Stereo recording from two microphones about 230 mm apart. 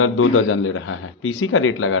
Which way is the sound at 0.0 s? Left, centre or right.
Left.